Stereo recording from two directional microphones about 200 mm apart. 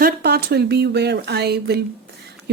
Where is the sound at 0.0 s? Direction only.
50° right (ahead or behind).